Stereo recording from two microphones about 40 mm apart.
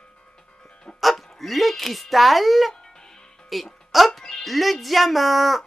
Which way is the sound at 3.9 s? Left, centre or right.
Centre.